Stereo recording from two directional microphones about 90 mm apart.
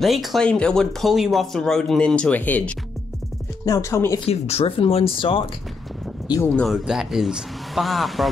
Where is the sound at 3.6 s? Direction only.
35° left (ahead or behind).